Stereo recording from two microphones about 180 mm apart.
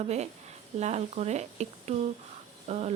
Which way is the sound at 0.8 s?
40° right (ahead or behind).